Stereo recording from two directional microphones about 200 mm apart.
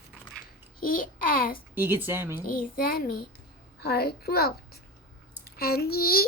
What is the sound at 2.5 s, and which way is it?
A child's voice, 45° left (ahead or behind).